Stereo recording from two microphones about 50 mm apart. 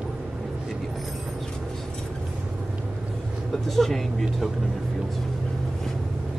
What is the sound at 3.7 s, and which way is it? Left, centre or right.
Speech, centre.